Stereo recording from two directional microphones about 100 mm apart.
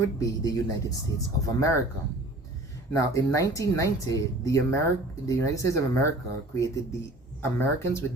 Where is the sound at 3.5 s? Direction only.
35° left (ahead or behind).